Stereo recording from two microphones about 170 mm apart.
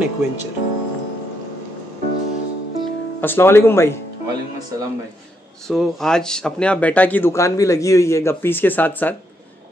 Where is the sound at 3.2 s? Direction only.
15° left (ahead or behind).